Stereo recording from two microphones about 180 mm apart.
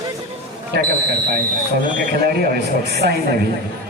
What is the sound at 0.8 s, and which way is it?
Speech, 50° right (ahead or behind).